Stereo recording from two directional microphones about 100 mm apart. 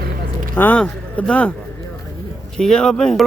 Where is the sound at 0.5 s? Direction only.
15° left (ahead or behind).